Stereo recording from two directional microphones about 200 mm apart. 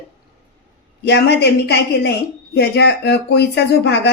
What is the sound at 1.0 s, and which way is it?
Speech, 55° left (ahead or behind).